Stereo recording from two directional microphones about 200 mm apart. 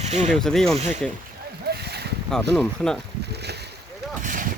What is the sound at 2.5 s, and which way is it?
Speech, 5° left (ahead or behind).